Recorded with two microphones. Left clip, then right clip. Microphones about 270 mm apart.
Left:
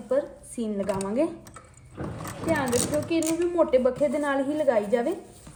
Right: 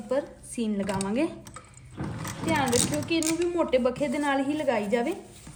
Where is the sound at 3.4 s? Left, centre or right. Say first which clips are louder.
Left 3 dB; right.